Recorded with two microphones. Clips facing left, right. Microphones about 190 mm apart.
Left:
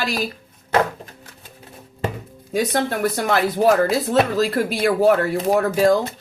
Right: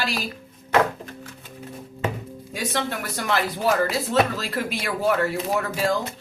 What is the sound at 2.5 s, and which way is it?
Speech, 45° left (ahead or behind).